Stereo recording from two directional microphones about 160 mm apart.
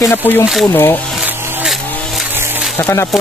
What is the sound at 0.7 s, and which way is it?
Speech, 10° left (ahead or behind).